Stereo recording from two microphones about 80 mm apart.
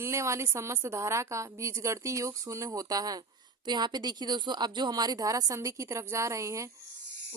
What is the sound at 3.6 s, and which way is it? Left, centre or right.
A woman's voice, right.